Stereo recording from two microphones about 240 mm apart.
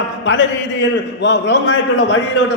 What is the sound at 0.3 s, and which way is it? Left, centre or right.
A man's voice, left.